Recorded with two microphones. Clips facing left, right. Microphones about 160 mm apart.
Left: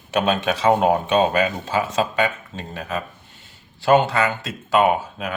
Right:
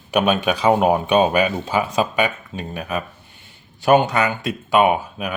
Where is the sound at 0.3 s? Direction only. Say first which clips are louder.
Even; 15° right (ahead or behind).